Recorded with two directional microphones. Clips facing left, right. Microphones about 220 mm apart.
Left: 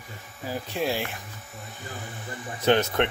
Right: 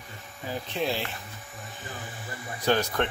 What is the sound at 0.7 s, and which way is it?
Speech, 10° left (ahead or behind).